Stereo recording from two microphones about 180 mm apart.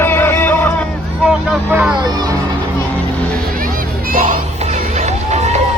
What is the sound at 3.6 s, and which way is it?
Music, 50° right (ahead or behind).